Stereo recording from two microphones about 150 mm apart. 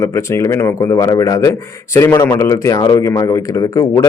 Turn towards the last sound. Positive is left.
turn(degrees=20)  # may be behind; listen again after turning